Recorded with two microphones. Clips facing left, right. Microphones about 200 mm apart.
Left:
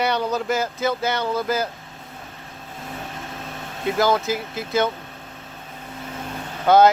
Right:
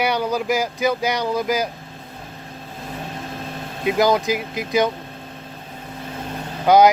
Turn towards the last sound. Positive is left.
turn(degrees=-15)  # may be behind; listen again after turning